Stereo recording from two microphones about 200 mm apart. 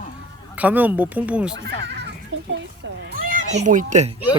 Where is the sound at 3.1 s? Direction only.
40° right (ahead or behind).